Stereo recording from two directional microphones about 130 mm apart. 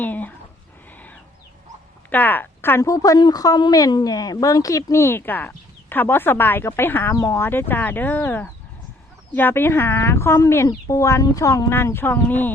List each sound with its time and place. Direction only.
0.0 s speech: 15° left (ahead or behind)
2.0 s a woman's voice: 15° left (ahead or behind)
2.9 s speech: 25° left (ahead or behind)